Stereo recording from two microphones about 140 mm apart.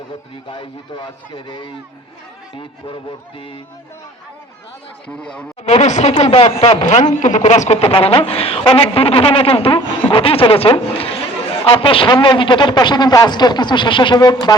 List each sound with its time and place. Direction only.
0.5 s a man's voice: 35° left (ahead or behind)
5.0 s speech: 5° left (ahead or behind)
5.6 s a man's voice: 50° left (ahead or behind); by 14.3 s 30° left (ahead or behind)